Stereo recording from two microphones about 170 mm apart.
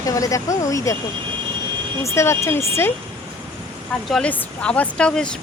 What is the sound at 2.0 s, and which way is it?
Speech, 15° left (ahead or behind).